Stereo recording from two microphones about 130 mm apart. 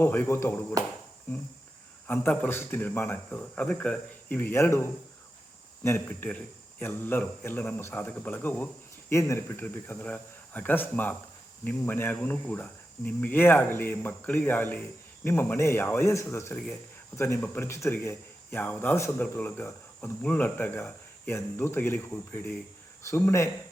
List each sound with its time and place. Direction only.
0.0 s speech: 15° left (ahead or behind)
2.0 s speech: 15° left (ahead or behind)